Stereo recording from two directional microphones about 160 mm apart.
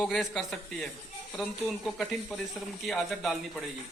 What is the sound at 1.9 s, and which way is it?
Speech, centre (ahead or behind).